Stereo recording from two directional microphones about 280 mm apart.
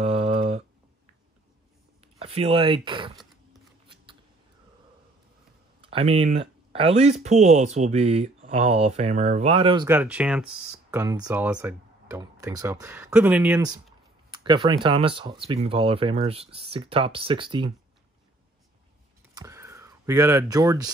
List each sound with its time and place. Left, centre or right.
0.0 s a sound: right
2.1 s speech: right
3.9 s scissors: centre
5.9 s speech: centre
9.8 s speech: centre
19.3 s a sound: centre